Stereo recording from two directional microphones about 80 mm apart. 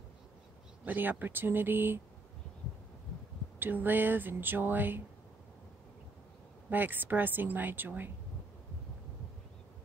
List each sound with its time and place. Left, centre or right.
0.8 s speech: right
3.5 s speech: right
6.7 s speech: right